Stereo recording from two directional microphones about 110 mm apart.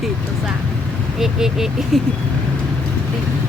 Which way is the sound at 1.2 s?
5° right (ahead or behind).